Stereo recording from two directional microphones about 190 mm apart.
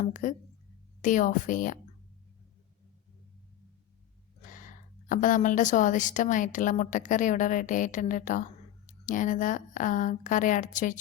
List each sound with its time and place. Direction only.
0.0 s a woman's voice: 40° left (ahead or behind)
4.4 s a woman's voice: 45° left (ahead or behind)